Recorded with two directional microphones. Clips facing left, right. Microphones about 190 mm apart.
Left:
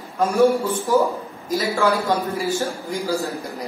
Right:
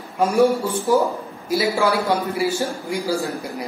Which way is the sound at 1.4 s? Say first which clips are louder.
Right 1 dB; 10° right (ahead or behind).